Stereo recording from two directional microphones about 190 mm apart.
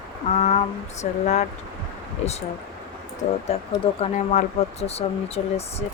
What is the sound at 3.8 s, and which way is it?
Speech, 30° left (ahead or behind).